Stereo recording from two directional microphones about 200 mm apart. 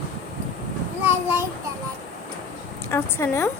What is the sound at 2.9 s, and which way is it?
Speech, 15° left (ahead or behind).